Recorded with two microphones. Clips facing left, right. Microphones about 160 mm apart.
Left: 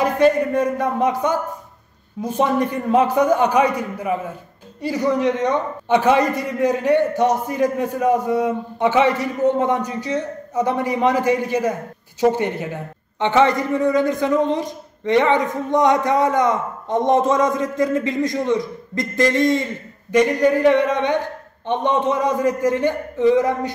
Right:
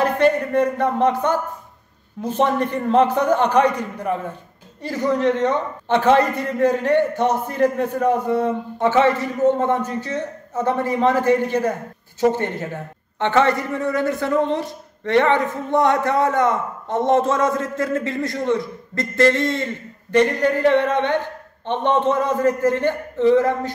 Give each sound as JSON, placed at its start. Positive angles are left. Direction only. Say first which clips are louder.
{"t": 0.0, "sound": "a man's voice", "louder": "left 1 dB", "side_deg": 10}